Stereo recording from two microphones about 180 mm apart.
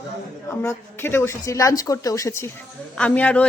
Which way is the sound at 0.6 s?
15° left (ahead or behind).